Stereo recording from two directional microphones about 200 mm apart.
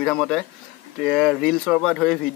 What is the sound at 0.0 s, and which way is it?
Speech, centre (ahead or behind).